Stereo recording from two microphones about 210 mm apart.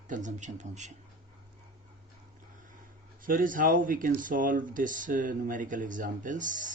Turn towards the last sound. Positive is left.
turn(degrees=-40)  # may be behind; listen again after turning